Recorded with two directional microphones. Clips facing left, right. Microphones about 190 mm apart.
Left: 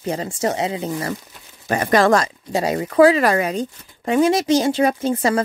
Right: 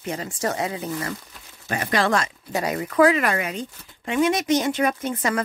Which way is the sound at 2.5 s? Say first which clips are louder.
Left 5 dB; 30° left (ahead or behind).